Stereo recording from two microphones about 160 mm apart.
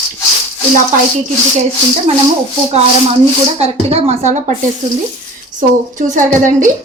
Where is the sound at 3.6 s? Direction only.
40° right (ahead or behind).